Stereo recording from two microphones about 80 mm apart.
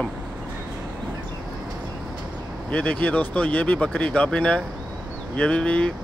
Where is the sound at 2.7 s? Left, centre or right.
Centre.